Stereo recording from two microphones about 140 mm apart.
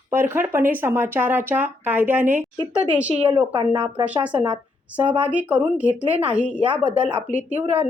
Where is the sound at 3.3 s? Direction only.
35° right (ahead or behind).